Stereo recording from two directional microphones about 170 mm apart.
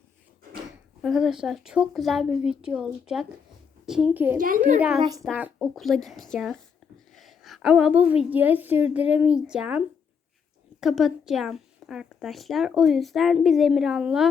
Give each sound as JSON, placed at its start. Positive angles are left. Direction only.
{"t": 1.0, "sound": "a child's voice", "side_deg": 0}
{"t": 4.4, "sound": "a child's voice", "side_deg": -55}
{"t": 5.2, "sound": "a woman's voice", "side_deg": 0}